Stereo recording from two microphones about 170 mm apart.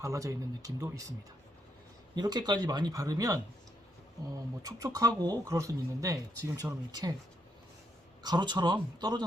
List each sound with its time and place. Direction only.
0.0 s speech: 20° right (ahead or behind)
2.1 s speech: 25° right (ahead or behind)
4.6 s speech: 20° right (ahead or behind)
8.2 s speech: 25° right (ahead or behind)